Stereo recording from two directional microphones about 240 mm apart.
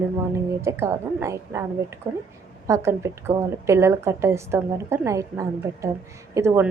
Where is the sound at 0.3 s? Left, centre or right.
Centre.